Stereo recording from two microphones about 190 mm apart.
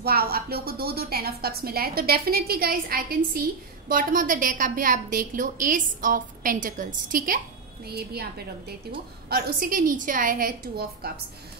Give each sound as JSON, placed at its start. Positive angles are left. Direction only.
{"t": 0.0, "sound": "a woman's voice", "side_deg": -55}